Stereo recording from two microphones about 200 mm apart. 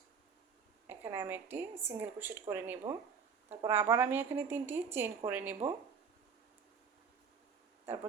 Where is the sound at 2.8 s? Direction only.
25° right (ahead or behind).